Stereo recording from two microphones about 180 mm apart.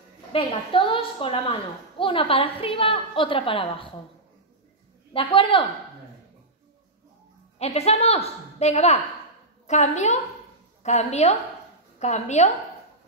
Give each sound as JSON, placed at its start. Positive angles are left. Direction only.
{"t": 0.3, "sound": "a woman's voice", "side_deg": 30}
{"t": 5.1, "sound": "a woman's voice", "side_deg": 30}
{"t": 7.5, "sound": "a woman's voice", "side_deg": 35}